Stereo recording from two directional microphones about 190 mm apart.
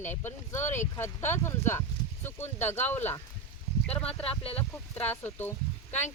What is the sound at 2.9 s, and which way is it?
Speech, 10° left (ahead or behind).